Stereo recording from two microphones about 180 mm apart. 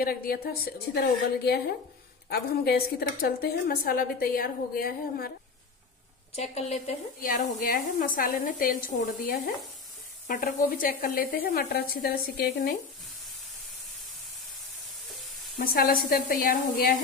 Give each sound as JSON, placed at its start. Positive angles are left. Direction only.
{"t": 0.0, "sound": "a woman's voice", "side_deg": 55}
{"t": 6.3, "sound": "a woman's voice", "side_deg": 35}
{"t": 7.2, "sound": "a woman's voice", "side_deg": 50}
{"t": 15.0, "sound": "stir", "side_deg": 0}
{"t": 15.6, "sound": "a woman's voice", "side_deg": 55}